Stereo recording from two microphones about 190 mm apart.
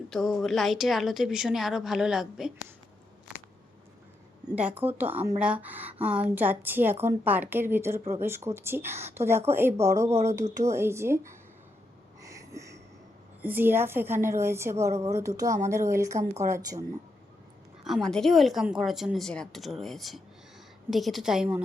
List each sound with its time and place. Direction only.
0.1 s a woman's voice: centre (ahead or behind)
4.5 s a woman's voice: 10° right (ahead or behind)
12.2 s a sound: 15° right (ahead or behind)
13.4 s a woman's voice: 10° right (ahead or behind)
17.8 s a woman's voice: centre (ahead or behind)